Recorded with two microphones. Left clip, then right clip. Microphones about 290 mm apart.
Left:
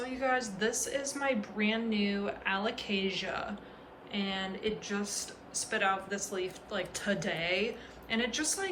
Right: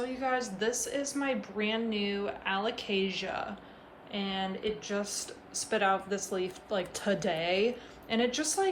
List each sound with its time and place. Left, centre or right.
0.0 s speech: centre